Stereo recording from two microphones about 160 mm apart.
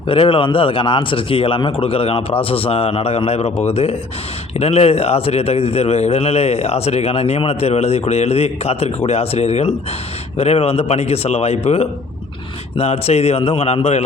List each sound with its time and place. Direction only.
0.1 s a man's voice: 35° left (ahead or behind)